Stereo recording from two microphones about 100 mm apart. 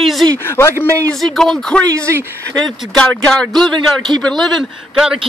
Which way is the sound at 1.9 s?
30° right (ahead or behind).